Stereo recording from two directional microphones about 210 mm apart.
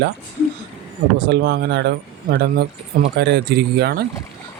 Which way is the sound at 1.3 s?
50° right (ahead or behind).